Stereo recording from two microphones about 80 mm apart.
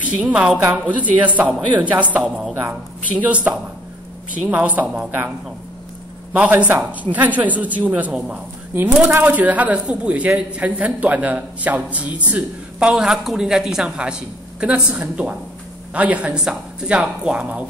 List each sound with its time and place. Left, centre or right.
0.0 s a woman's voice: centre
2.2 s a woman's voice: centre
3.2 s a man's voice: centre
6.3 s a man's voice: centre